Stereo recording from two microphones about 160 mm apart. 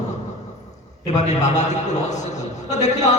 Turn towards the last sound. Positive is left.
turn(degrees=45)  # may be behind; listen again after turning